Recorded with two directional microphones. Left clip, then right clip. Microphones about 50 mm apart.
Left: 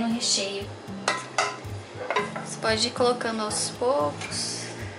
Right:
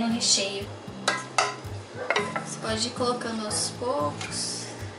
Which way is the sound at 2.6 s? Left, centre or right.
Left.